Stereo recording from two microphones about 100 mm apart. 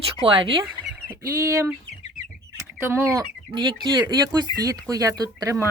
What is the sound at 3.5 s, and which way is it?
Speech, 50° right (ahead or behind).